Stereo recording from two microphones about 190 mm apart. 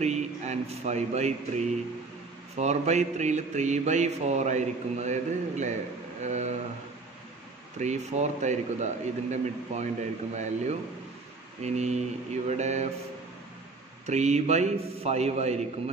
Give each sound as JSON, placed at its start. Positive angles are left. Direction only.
{"t": 0.0, "sound": "speech", "side_deg": -35}
{"t": 7.8, "sound": "speech", "side_deg": -35}
{"t": 14.0, "sound": "speech", "side_deg": -35}